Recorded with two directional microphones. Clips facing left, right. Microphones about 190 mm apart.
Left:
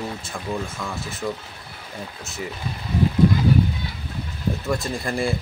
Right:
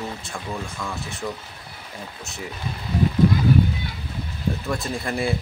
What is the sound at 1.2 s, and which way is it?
Speech, 5° left (ahead or behind).